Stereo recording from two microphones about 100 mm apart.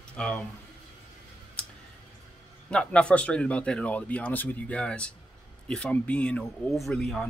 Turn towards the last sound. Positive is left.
turn(degrees=5)  # may be behind; listen again after turning